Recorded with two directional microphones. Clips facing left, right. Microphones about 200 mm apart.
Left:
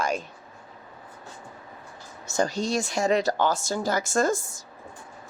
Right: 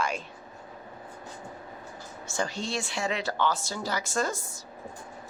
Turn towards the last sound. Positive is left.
turn(degrees=45)  # may be behind; listen again after turning